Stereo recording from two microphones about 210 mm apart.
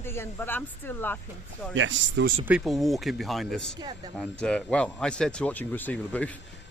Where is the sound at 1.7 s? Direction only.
65° right (ahead or behind).